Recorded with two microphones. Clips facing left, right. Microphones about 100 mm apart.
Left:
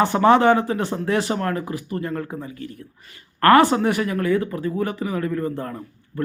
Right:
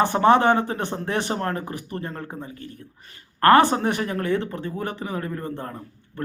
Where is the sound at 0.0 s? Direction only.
20° right (ahead or behind).